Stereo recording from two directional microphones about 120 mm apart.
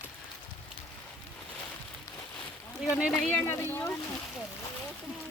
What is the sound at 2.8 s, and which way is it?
Speech, 5° right (ahead or behind).